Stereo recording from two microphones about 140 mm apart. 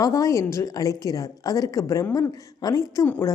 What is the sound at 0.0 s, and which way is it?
A woman's voice, 25° left (ahead or behind).